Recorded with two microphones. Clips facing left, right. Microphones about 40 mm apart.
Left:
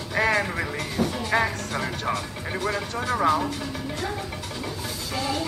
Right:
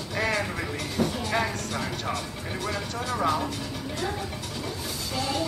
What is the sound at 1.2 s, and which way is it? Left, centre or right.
Speech, centre.